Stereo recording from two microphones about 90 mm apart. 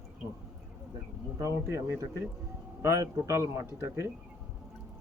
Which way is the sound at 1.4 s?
35° right (ahead or behind).